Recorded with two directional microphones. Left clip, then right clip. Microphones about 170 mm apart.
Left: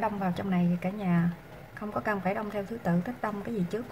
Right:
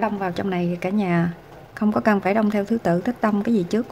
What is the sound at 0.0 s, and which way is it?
A woman's voice, 50° right (ahead or behind).